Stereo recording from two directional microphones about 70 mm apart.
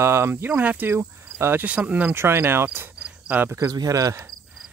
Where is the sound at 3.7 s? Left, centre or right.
Right.